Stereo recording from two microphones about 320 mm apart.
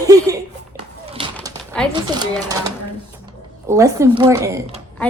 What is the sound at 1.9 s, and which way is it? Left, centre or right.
Speech, centre.